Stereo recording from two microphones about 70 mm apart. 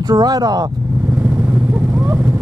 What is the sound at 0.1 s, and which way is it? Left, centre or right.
Speech, right.